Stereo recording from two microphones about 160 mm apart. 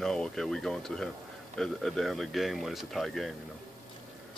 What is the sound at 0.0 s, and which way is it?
Speech, 5° left (ahead or behind).